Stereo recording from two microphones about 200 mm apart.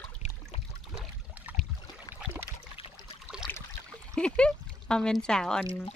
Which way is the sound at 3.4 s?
20° left (ahead or behind).